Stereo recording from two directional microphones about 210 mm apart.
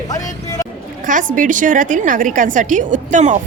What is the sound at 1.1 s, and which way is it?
A woman's voice, 40° right (ahead or behind).